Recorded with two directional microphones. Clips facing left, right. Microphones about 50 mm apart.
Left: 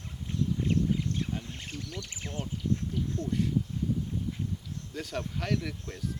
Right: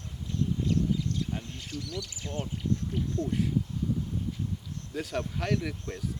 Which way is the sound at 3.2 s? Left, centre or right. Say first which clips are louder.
Right 1 dB; centre.